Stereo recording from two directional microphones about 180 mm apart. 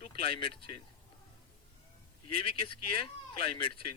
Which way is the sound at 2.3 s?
30° left (ahead or behind).